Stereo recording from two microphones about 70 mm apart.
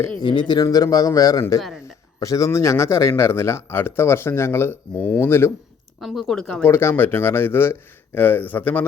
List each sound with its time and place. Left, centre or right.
0.2 s a man's voice: left
6.0 s speech: centre
6.7 s speech: left